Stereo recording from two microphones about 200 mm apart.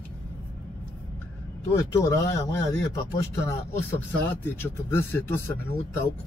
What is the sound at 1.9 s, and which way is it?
Speech, 15° left (ahead or behind).